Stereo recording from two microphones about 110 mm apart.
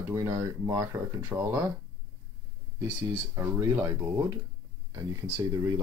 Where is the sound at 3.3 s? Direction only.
25° right (ahead or behind).